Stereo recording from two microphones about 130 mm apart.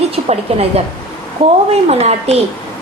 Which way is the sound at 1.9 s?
55° right (ahead or behind).